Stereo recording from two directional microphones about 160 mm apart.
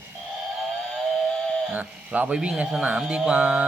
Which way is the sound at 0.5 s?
Centre (ahead or behind).